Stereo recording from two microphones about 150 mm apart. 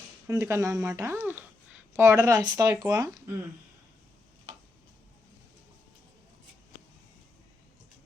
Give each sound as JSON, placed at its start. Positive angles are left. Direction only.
{"t": 0.3, "sound": "speech", "side_deg": -20}